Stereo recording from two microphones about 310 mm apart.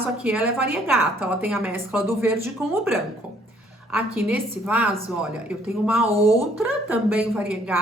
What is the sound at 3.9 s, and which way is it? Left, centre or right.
A woman's voice, centre.